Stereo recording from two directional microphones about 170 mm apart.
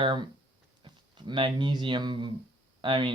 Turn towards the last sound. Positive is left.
turn(degrees=-30)  # may be behind; listen again after turning